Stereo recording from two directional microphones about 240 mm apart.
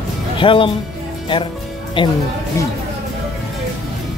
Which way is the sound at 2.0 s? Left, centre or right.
Left.